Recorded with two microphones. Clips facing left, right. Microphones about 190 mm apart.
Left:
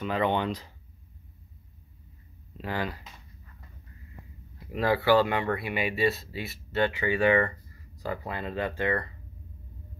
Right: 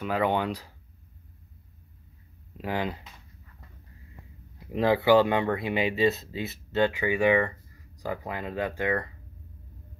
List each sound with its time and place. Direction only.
0.0 s speech: 10° right (ahead or behind)
2.5 s speech: 15° right (ahead or behind)
4.7 s speech: 20° right (ahead or behind)